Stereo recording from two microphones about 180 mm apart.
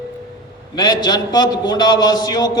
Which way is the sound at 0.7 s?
20° left (ahead or behind).